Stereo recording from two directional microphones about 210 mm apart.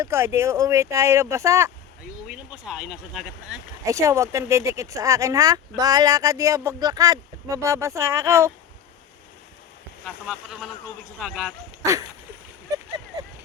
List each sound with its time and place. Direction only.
0.0 s speech: 15° right (ahead or behind)
2.2 s speech: centre (ahead or behind)
3.8 s speech: 15° right (ahead or behind)
10.2 s speech: centre (ahead or behind)
11.8 s a sound: 15° right (ahead or behind)